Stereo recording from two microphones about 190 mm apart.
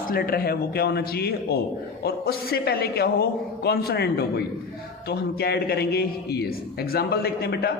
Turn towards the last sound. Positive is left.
turn(degrees=55)  # may be behind; listen again after turning